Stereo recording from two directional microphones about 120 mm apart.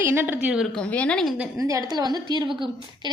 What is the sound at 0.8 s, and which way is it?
Speech, 10° left (ahead or behind).